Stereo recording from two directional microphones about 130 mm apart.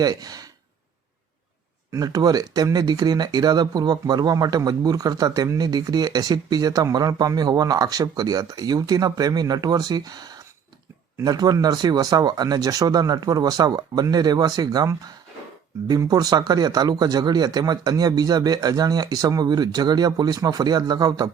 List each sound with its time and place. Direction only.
0.0 s speech: 30° right (ahead or behind)
1.9 s speech: 30° right (ahead or behind)